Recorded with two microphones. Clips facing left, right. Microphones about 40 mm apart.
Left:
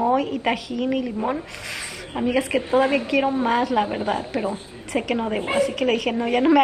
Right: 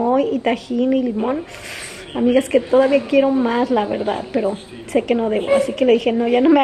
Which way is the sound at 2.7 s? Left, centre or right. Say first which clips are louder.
Right 5 dB; left.